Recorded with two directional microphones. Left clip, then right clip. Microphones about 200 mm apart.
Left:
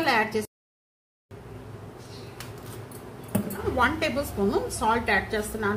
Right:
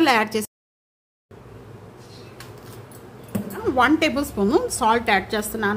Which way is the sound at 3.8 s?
55° right (ahead or behind).